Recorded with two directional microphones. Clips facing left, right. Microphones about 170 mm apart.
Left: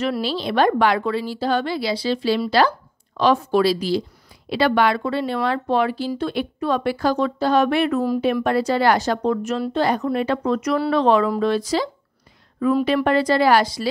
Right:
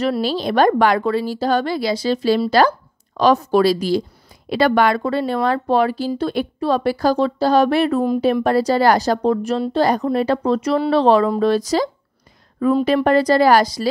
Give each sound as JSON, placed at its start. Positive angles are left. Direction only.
{"t": 0.0, "sound": "a woman's voice", "side_deg": -40}